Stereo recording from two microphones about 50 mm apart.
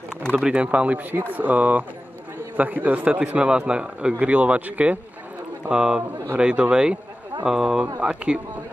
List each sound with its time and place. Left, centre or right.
0.5 s speech: right
3.3 s speech: right
5.7 s speech: centre